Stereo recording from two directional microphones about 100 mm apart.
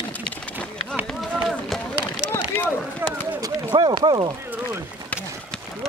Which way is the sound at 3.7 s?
50° right (ahead or behind).